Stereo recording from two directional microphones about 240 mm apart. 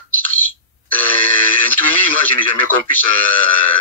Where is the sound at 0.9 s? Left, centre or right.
Centre.